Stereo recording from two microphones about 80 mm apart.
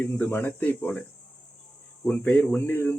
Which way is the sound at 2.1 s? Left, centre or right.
Centre.